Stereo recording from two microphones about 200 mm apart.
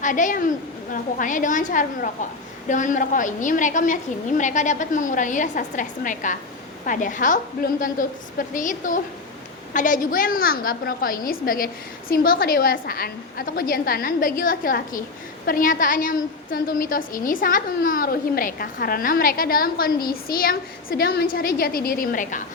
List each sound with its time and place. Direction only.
0.0 s a woman's voice: 40° left (ahead or behind)